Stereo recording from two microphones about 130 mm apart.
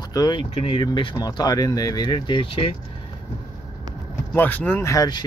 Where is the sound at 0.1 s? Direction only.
35° left (ahead or behind).